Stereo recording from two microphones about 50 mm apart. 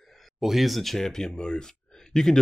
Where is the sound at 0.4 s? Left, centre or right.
Centre.